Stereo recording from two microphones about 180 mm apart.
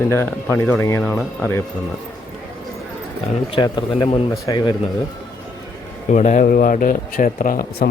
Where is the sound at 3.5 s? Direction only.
25° left (ahead or behind).